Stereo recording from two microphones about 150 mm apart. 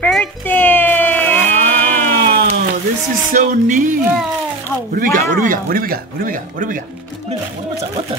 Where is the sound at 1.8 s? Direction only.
15° left (ahead or behind).